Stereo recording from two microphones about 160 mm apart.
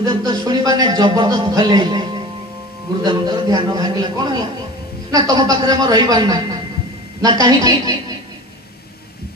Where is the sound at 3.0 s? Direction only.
25° right (ahead or behind).